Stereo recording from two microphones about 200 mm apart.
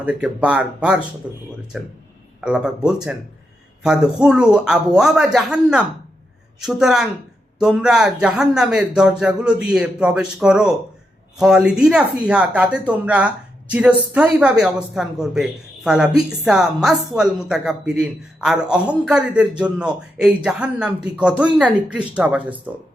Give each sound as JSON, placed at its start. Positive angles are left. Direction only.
{"t": 0.0, "sound": "speech", "side_deg": -5}